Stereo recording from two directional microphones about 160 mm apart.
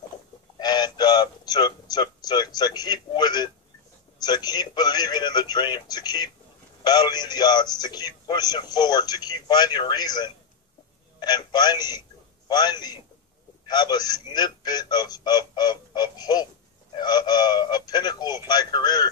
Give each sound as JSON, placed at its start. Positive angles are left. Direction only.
{"t": 0.6, "sound": "music", "side_deg": 25}
{"t": 4.2, "sound": "a man's voice", "side_deg": 25}